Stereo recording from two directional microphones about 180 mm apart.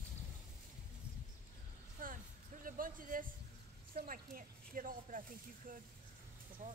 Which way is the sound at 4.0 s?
50° right (ahead or behind).